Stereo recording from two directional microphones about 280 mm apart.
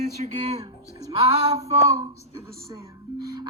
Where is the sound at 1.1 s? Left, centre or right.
Right.